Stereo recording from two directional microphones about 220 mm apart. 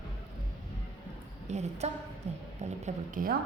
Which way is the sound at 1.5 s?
30° right (ahead or behind).